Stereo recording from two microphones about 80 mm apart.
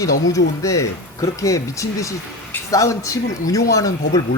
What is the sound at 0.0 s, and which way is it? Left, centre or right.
Speech, left.